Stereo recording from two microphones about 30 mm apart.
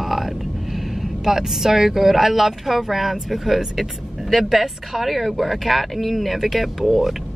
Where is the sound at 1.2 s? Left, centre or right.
Centre.